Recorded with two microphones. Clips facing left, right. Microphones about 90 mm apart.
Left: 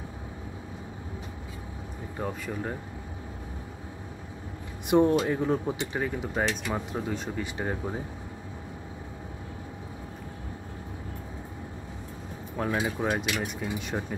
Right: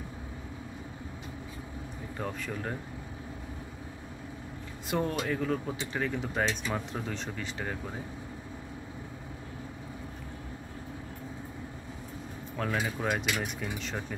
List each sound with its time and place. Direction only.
2.1 s speech: 10° left (ahead or behind)
4.8 s speech: 20° left (ahead or behind)
12.5 s speech: 15° left (ahead or behind)